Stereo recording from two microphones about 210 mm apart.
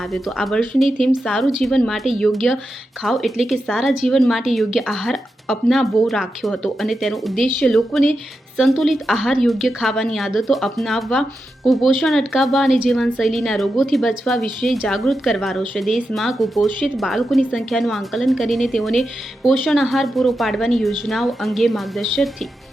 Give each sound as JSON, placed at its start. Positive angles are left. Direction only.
{"t": 0.0, "sound": "a woman's voice", "side_deg": 0}